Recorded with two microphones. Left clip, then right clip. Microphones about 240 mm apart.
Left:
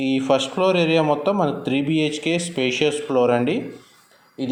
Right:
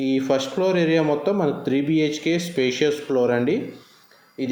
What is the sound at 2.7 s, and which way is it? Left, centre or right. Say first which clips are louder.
Speech: left 3 dB; centre.